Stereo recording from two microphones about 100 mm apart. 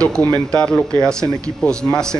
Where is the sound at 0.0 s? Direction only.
15° left (ahead or behind).